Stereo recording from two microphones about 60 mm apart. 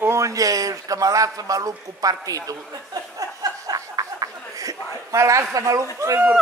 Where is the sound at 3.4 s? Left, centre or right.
Right.